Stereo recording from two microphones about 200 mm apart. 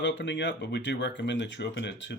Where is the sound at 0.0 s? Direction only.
60° left (ahead or behind).